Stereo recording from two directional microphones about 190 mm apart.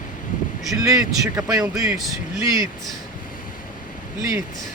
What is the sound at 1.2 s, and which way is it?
Speech, 15° right (ahead or behind).